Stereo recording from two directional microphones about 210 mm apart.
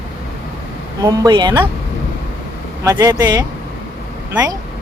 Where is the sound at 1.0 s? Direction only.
15° right (ahead or behind).